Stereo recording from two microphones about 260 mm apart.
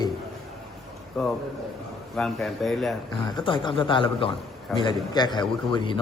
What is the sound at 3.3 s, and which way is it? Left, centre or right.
A man's voice, centre.